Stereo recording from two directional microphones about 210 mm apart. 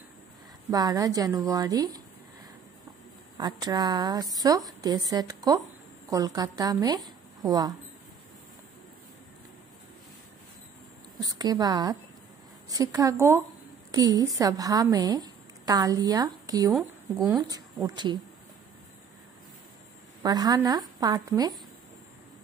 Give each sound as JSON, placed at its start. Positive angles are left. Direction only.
{"t": 0.7, "sound": "a woman's voice", "side_deg": -15}
{"t": 3.3, "sound": "a woman's voice", "side_deg": -20}
{"t": 11.1, "sound": "a woman's voice", "side_deg": -20}
{"t": 20.2, "sound": "a woman's voice", "side_deg": -20}